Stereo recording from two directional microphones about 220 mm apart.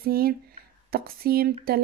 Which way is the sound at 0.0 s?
45° right (ahead or behind).